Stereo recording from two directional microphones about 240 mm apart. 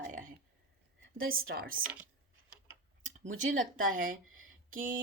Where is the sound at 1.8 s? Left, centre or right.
Centre.